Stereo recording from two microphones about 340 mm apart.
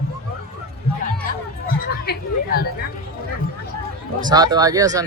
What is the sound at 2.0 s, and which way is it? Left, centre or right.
Speech, left.